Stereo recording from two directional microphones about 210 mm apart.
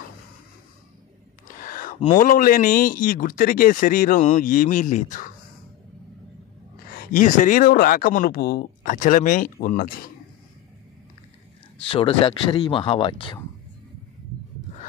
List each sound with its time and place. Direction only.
1.6 s a sound: 40° left (ahead or behind)
2.1 s speech: 40° left (ahead or behind)
6.9 s speech: 45° left (ahead or behind)
11.8 s speech: 25° left (ahead or behind)